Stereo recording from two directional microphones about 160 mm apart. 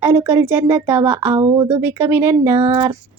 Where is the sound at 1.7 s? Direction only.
15° right (ahead or behind).